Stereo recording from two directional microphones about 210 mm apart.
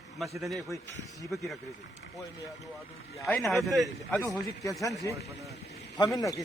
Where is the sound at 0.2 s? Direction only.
Centre (ahead or behind).